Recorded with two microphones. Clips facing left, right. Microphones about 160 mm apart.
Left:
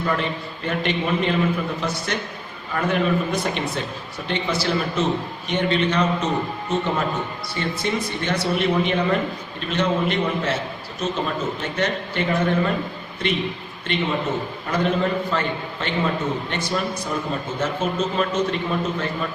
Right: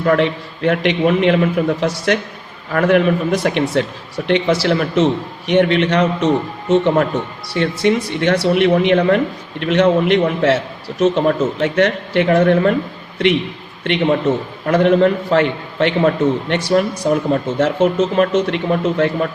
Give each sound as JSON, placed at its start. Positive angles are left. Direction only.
{"t": 0.0, "sound": "a man's voice", "side_deg": -75}
{"t": 13.8, "sound": "a man's voice", "side_deg": -70}